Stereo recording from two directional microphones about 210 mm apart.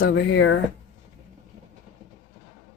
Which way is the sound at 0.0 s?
55° left (ahead or behind).